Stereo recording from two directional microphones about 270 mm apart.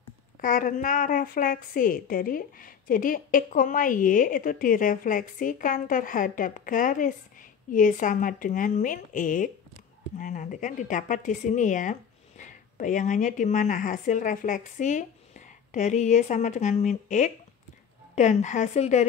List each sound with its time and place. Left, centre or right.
0.4 s a woman's voice: left